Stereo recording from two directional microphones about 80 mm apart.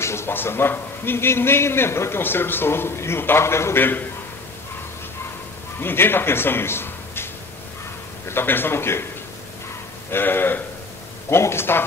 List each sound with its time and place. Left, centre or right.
0.0 s a man's voice: left
5.8 s a man's voice: left
8.3 s a man's voice: left
10.1 s a man's voice: left